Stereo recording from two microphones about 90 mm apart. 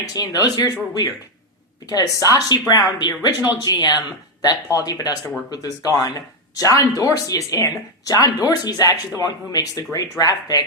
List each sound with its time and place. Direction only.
0.0 s speech: 40° left (ahead or behind)